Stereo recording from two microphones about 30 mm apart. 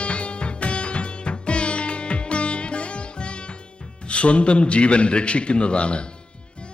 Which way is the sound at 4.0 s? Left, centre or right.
Left.